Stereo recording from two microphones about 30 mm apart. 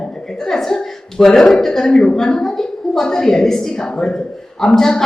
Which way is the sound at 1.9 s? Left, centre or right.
Left.